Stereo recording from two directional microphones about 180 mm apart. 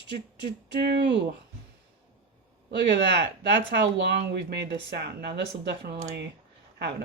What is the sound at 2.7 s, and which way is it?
Speech, 70° right (ahead or behind).